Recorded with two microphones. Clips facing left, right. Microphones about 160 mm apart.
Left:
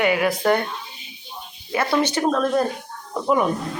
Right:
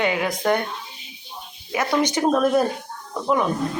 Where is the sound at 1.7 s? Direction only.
10° right (ahead or behind).